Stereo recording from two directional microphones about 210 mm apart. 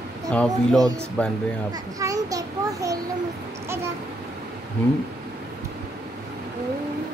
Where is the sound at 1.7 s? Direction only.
15° right (ahead or behind).